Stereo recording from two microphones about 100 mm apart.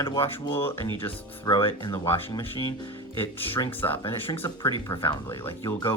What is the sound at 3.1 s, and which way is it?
Speech, 20° left (ahead or behind).